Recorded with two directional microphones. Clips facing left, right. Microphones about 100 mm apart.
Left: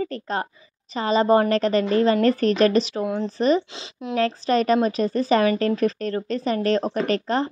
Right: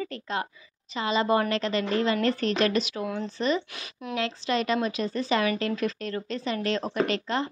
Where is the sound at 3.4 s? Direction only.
40° left (ahead or behind).